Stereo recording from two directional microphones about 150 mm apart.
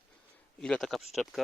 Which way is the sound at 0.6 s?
5° left (ahead or behind).